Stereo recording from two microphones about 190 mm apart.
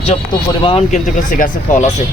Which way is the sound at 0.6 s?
30° left (ahead or behind).